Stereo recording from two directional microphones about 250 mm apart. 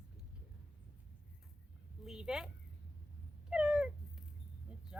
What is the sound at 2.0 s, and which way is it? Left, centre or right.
Speech, centre.